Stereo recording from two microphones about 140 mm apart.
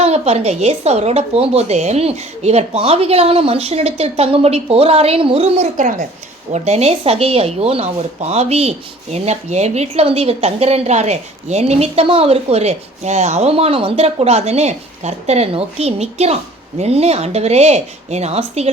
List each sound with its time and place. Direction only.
0.0 s speech: 50° right (ahead or behind)
5.7 s a woman's voice: 65° right (ahead or behind)
6.5 s speech: 50° right (ahead or behind)